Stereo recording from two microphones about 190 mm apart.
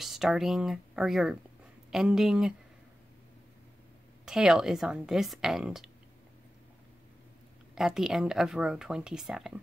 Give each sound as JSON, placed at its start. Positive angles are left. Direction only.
{"t": 0.0, "sound": "speech", "side_deg": 0}
{"t": 4.3, "sound": "speech", "side_deg": -5}
{"t": 7.7, "sound": "speech", "side_deg": 0}